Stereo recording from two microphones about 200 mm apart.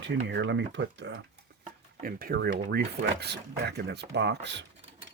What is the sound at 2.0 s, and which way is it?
Speech, 45° right (ahead or behind).